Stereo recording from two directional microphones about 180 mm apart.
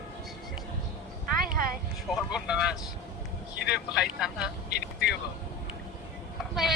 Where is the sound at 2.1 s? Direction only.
5° right (ahead or behind).